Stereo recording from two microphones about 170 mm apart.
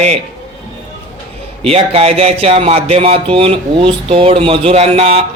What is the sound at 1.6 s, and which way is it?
Speech, 35° right (ahead or behind).